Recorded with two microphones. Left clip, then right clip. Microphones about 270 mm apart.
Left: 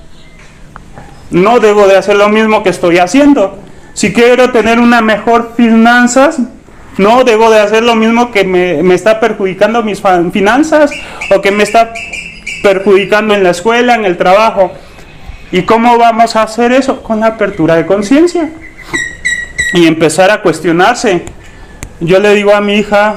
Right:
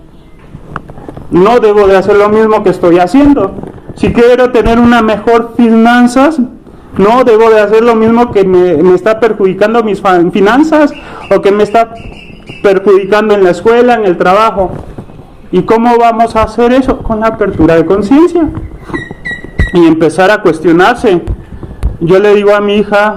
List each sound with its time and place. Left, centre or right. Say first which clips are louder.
1.3 s a man's voice: right 1 dB; left
19.7 s a man's voice: right 2 dB; left